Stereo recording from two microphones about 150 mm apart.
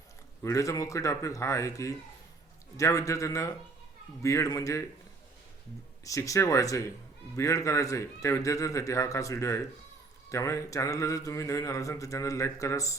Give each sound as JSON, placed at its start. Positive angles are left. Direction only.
{"t": 0.4, "sound": "speech", "side_deg": 20}
{"t": 6.1, "sound": "speech", "side_deg": 20}